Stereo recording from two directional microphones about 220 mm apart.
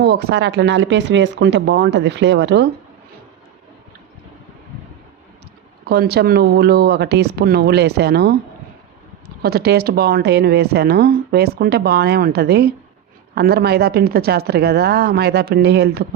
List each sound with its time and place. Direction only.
0.0 s speech: 45° right (ahead or behind)
5.9 s speech: 45° right (ahead or behind)
9.4 s speech: 45° right (ahead or behind)